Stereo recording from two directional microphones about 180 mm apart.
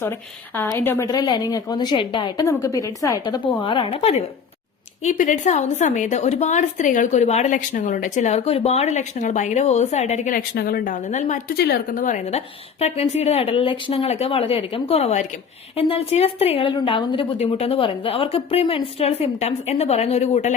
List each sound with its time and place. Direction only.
0.5 s a woman's voice: 10° left (ahead or behind); by 4.1 s 35° left (ahead or behind)
5.0 s a woman's voice: 45° left (ahead or behind)
10.5 s speech: 60° left (ahead or behind)
11.1 s a woman's voice: 40° left (ahead or behind)
11.5 s a woman's voice: 60° left (ahead or behind); by 20.5 s 40° left (ahead or behind)